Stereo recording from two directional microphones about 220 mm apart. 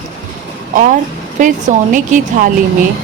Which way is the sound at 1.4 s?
35° right (ahead or behind).